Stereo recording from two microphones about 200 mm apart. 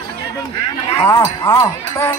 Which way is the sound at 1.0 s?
15° left (ahead or behind).